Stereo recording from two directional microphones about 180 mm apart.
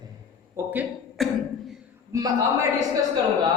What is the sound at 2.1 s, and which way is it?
Speech, 20° right (ahead or behind).